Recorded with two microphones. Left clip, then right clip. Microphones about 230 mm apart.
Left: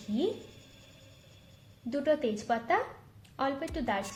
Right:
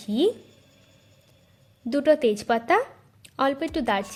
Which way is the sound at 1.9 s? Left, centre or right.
Right.